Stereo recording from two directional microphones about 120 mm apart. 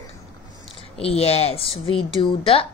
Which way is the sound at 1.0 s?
55° left (ahead or behind).